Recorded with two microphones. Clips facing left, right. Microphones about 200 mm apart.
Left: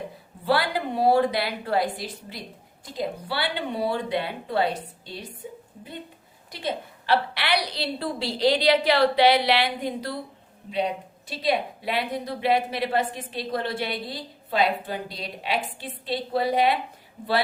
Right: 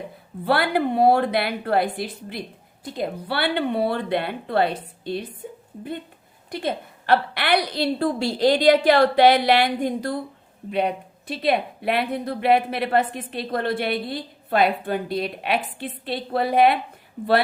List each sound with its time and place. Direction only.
0.4 s speech: 60° right (ahead or behind)
6.5 s a woman's voice: 50° right (ahead or behind)